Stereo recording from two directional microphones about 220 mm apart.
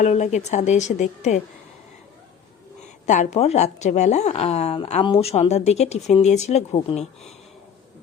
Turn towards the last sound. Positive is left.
turn(degrees=30)  # may be behind; listen again after turning